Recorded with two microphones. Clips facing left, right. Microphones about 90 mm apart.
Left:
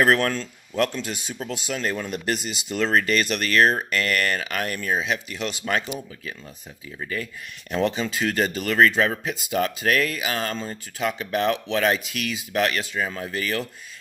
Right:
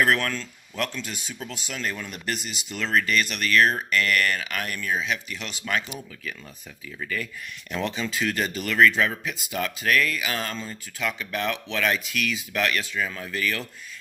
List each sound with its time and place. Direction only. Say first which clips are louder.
0.0 s speech: left 3 dB; 35° left (ahead or behind)
10.4 s speech: left 4 dB; 40° left (ahead or behind)